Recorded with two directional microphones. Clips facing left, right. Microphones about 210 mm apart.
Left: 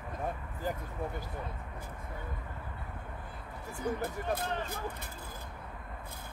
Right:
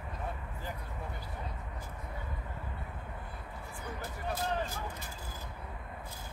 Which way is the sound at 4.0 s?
55° left (ahead or behind).